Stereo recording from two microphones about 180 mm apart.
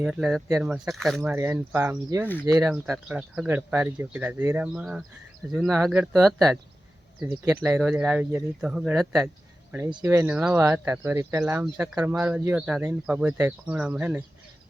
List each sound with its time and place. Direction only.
0.0 s speech: centre (ahead or behind)
2.2 s speech: 10° left (ahead or behind)
2.7 s speech: 5° right (ahead or behind)
7.3 s speech: 20° right (ahead or behind)
7.8 s speech: 5° right (ahead or behind)
9.9 s speech: 20° right (ahead or behind)
11.6 s speech: 5° right (ahead or behind)